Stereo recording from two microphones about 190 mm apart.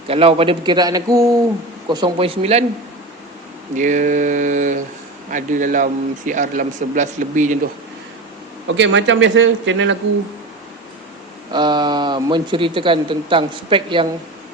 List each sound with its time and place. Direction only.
0.1 s speech: 30° right (ahead or behind)
3.8 s speech: 40° right (ahead or behind)
8.6 s a man's voice: 75° right (ahead or behind)
11.5 s speech: 25° right (ahead or behind)